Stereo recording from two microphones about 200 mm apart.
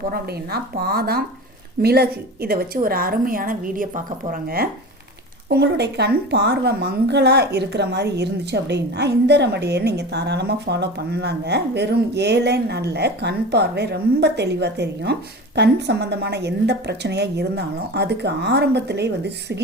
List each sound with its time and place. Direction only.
0.1 s a woman's voice: 50° right (ahead or behind)